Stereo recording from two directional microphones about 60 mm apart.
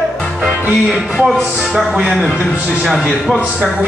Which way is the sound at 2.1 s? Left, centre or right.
Centre.